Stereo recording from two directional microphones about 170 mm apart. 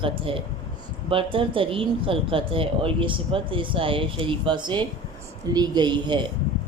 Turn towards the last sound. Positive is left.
turn(degrees=-25)  # may be behind; listen again after turning